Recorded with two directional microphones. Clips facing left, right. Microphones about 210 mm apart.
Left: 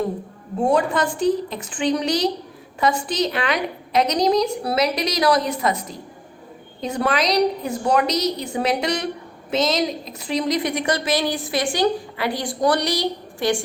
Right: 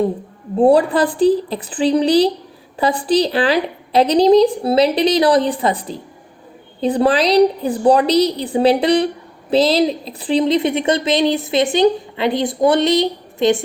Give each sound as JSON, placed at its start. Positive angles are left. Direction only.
{"t": 0.6, "sound": "a woman's voice", "side_deg": -35}